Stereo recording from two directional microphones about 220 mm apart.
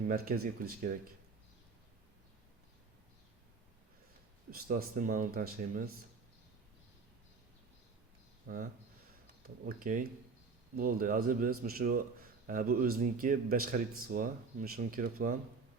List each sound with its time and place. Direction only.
0.3 s speech: 40° right (ahead or behind)
4.5 s speech: 40° right (ahead or behind)
8.5 s speech: 45° right (ahead or behind)
9.6 s speech: 40° right (ahead or behind)